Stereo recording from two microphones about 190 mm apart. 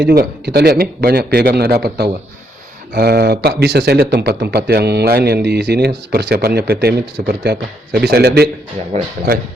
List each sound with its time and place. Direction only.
0.0 s speech: 60° right (ahead or behind)